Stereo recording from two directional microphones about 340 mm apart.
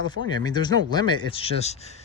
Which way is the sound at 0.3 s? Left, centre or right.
Centre.